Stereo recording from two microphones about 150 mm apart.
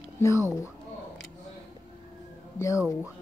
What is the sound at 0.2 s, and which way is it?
Speech, 20° left (ahead or behind).